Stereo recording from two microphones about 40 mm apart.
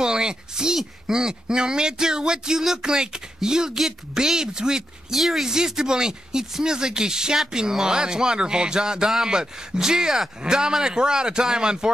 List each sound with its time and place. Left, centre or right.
0.0 s a sound: centre
1.1 s speech: centre
5.1 s a man's voice: centre